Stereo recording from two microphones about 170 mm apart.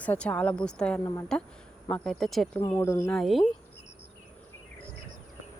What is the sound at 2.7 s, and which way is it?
Speech, 15° left (ahead or behind).